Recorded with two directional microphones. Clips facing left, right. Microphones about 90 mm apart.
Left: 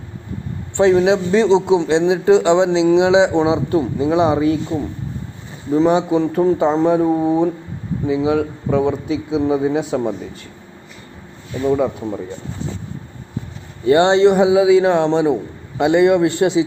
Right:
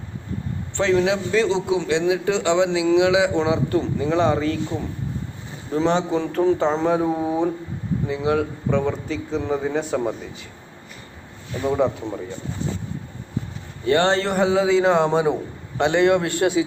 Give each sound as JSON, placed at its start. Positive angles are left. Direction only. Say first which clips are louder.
{"t": 0.8, "sound": "a man's voice", "louder": "left 6 dB", "side_deg": 25}
{"t": 11.6, "sound": "a man's voice", "louder": "left 3 dB", "side_deg": 0}
{"t": 13.8, "sound": "a man's voice", "louder": "left 7 dB", "side_deg": 20}